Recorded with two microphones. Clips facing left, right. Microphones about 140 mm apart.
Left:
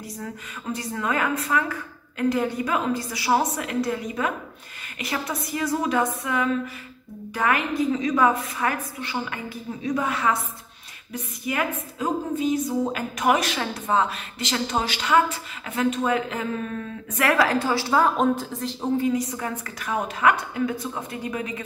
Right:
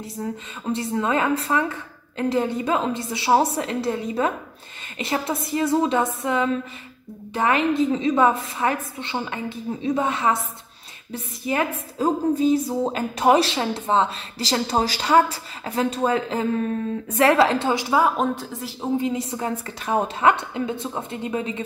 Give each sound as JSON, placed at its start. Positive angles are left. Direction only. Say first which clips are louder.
{"t": 0.0, "sound": "a woman's voice", "louder": "right 5 dB", "side_deg": -25}
{"t": 18.9, "sound": "a woman's voice", "louder": "even", "side_deg": -25}